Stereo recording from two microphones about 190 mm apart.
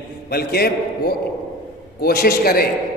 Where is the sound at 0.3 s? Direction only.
55° left (ahead or behind).